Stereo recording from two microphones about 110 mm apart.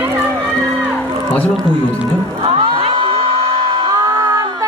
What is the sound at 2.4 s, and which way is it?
Music, 55° right (ahead or behind).